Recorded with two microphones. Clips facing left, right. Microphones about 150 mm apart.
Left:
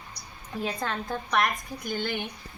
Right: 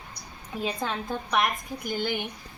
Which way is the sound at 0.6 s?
10° right (ahead or behind).